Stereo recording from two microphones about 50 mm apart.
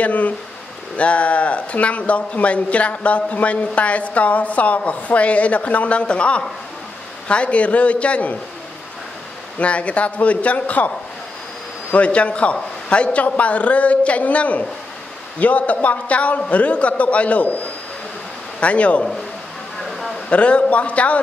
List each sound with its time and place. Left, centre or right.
0.0 s speech: left
9.6 s speech: left
11.9 s speech: left
18.6 s speech: left
20.2 s speech: left